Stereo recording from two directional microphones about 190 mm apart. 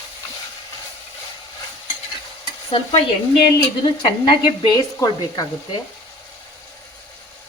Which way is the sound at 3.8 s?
25° left (ahead or behind).